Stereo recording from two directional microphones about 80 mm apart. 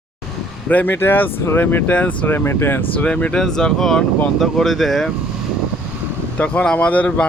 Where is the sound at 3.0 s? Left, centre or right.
Centre.